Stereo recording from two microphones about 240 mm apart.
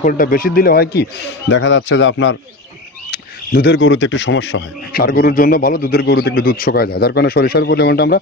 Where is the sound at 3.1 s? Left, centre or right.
Left.